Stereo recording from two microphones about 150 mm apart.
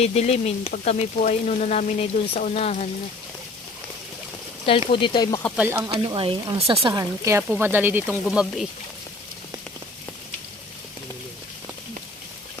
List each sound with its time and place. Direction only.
0.0 s frying: 45° left (ahead or behind)
4.6 s speech: 35° left (ahead or behind)
5.5 s speech: 15° right (ahead or behind)
6.1 s speech: 35° right (ahead or behind)
6.9 s speech: 20° right (ahead or behind); by 8.6 s 5° right (ahead or behind)